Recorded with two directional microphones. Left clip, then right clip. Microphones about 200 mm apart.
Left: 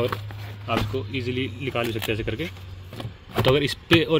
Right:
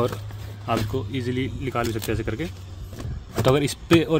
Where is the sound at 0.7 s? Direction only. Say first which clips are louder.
Right 1 dB; 15° right (ahead or behind).